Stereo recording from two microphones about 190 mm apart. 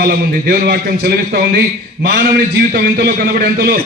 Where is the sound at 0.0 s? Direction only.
55° right (ahead or behind).